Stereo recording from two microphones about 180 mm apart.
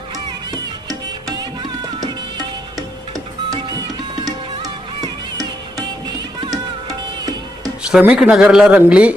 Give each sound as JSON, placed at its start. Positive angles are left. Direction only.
{"t": 1.4, "sound": "music", "side_deg": -20}
{"t": 3.5, "sound": "music", "side_deg": -20}
{"t": 7.9, "sound": "speech", "side_deg": -5}